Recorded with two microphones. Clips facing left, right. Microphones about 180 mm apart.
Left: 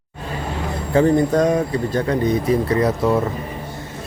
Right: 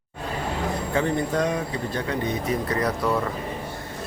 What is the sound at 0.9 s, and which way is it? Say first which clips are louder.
Speech: left 10 dB; 40° left (ahead or behind).